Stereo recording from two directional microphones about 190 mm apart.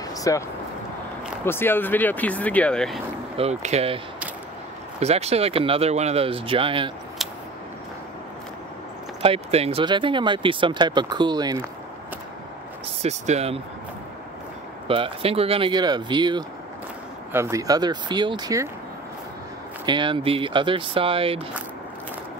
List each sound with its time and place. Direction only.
0.1 s a sound: 15° left (ahead or behind)
1.4 s speech: 10° left (ahead or behind)
3.3 s speech: 35° right (ahead or behind)
5.0 s speech: 35° right (ahead or behind)
9.2 s speech: 30° right (ahead or behind)
13.0 s speech: 35° right (ahead or behind)
14.9 s speech: 30° right (ahead or behind)
19.9 s speech: 25° right (ahead or behind)